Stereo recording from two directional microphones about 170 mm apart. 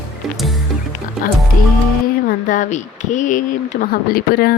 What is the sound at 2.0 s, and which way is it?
Speech, 55° left (ahead or behind).